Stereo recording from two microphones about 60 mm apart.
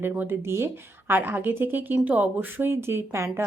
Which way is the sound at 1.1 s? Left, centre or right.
Right.